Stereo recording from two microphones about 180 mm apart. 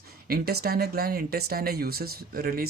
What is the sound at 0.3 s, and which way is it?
Speech, 60° right (ahead or behind).